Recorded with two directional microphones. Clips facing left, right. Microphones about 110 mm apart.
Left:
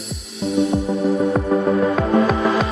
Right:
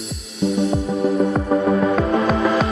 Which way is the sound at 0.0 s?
Centre (ahead or behind).